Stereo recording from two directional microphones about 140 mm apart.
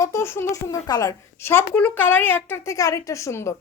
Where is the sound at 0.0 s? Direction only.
20° left (ahead or behind).